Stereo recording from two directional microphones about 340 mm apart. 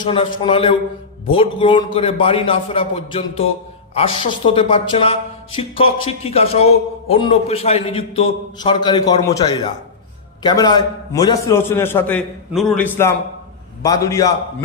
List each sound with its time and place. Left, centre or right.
0.0 s a man's voice: centre